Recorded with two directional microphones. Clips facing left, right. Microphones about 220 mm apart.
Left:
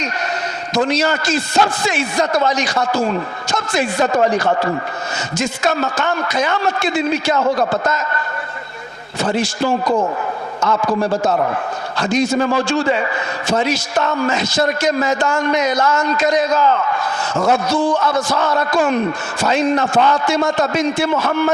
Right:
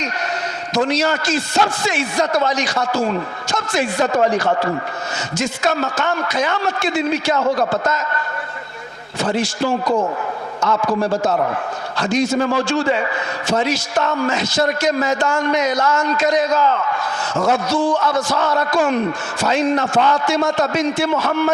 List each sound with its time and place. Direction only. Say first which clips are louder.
0.7 s a man's voice: left 1 dB; 10° left (ahead or behind)
9.2 s a man's voice: left 1 dB; 10° left (ahead or behind)
9.8 s a man's voice: left 1 dB; 35° left (ahead or behind)
11.9 s a man's voice: left 1 dB; 10° left (ahead or behind)